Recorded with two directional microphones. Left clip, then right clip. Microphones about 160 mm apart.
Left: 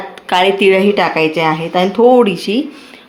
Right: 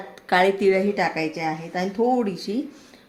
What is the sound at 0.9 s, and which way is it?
Speech, 25° left (ahead or behind).